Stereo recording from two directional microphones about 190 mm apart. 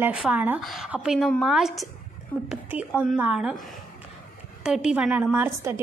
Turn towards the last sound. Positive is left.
turn(degrees=-10)  # may be behind; listen again after turning